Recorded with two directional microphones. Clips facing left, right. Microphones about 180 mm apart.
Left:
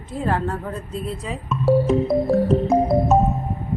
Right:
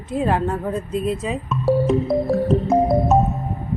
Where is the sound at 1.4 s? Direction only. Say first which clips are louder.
Left 1 dB; centre (ahead or behind).